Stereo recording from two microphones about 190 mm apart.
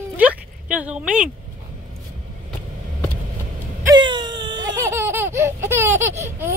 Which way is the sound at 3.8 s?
25° right (ahead or behind).